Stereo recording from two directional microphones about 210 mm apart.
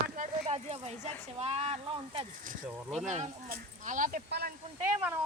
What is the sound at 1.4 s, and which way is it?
Speech, 30° right (ahead or behind).